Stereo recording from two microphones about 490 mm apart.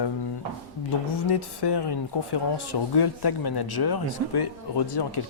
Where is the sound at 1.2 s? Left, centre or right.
Left.